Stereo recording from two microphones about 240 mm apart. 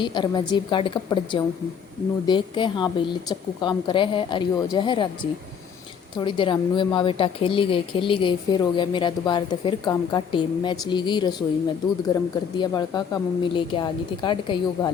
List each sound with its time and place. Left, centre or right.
0.0 s speech: centre
6.1 s speech: centre